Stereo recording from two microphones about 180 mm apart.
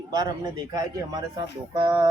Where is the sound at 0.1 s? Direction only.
20° right (ahead or behind).